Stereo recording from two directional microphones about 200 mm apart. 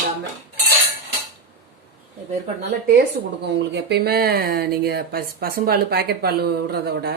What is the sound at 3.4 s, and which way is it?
Speech, 60° right (ahead or behind).